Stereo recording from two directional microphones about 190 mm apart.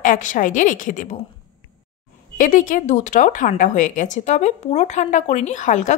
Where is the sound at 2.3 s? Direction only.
45° left (ahead or behind).